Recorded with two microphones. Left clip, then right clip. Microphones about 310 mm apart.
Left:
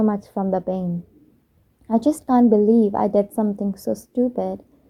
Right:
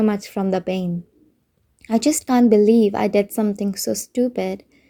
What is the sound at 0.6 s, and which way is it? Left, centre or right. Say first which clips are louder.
Speech: right 1 dB; right.